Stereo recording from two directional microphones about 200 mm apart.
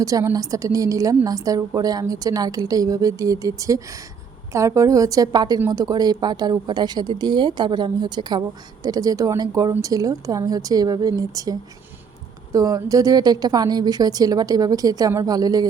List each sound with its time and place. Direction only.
0.0 s a woman's voice: 15° right (ahead or behind)
12.5 s a woman's voice: 15° right (ahead or behind)